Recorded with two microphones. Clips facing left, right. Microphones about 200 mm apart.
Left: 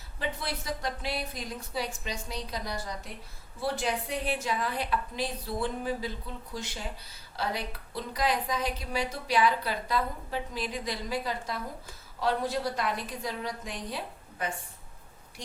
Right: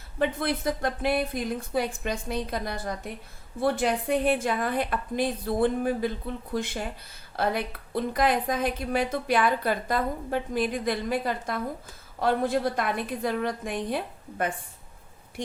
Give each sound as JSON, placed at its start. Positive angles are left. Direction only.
{"t": 0.2, "sound": "a woman's voice", "side_deg": -55}